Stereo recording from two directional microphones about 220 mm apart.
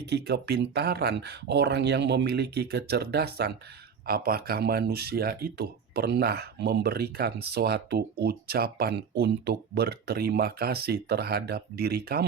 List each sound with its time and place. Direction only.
0.0 s speech: 50° right (ahead or behind)